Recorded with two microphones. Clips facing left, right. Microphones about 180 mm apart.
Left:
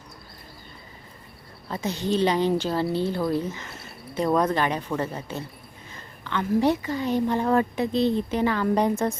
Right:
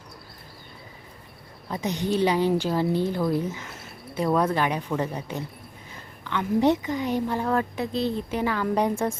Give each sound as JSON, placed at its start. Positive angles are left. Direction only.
{"t": 1.7, "sound": "a woman's voice", "side_deg": -15}
{"t": 7.4, "sound": "speech", "side_deg": 5}